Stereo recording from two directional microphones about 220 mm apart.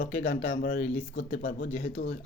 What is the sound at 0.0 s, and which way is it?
Speech, 35° left (ahead or behind).